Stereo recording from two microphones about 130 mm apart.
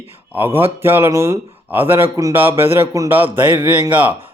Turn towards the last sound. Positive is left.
turn(degrees=-15)  # may be behind; listen again after turning